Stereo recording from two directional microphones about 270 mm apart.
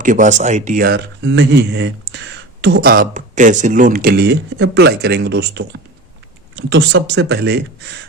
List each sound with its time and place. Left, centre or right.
0.0 s speech: right